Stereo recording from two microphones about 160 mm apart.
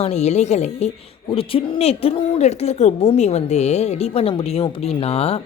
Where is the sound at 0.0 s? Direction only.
45° left (ahead or behind).